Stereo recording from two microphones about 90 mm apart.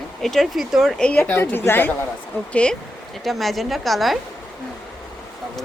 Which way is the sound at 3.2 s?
Centre (ahead or behind).